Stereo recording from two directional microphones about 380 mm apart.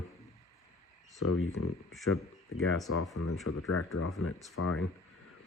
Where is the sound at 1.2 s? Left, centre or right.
Left.